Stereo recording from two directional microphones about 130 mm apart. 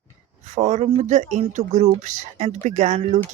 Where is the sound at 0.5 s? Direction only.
60° right (ahead or behind).